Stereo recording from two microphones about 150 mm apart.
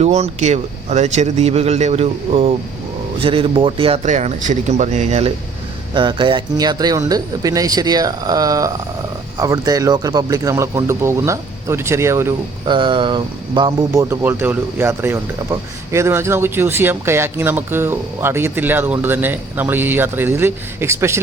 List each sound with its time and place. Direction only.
0.0 s speech: 45° right (ahead or behind)
5.9 s speech: 30° right (ahead or behind)
12.6 s speech: 30° right (ahead or behind)